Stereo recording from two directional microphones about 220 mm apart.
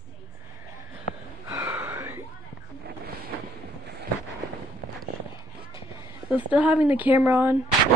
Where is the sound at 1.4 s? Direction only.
10° right (ahead or behind).